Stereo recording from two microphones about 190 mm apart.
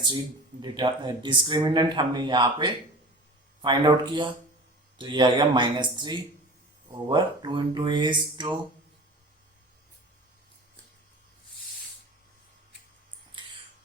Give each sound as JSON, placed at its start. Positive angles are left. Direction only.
{"t": 0.6, "sound": "speech", "side_deg": -25}